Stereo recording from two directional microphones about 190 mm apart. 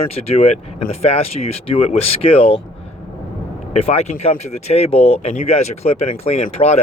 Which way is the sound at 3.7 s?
35° left (ahead or behind).